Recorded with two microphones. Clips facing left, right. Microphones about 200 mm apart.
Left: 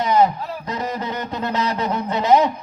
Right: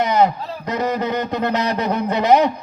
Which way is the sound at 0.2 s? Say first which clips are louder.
Right 1 dB; 70° right (ahead or behind).